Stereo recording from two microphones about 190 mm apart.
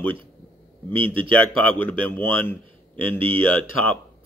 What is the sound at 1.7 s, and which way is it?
Speech, 10° left (ahead or behind).